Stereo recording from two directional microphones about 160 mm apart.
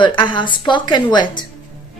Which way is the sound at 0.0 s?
30° left (ahead or behind).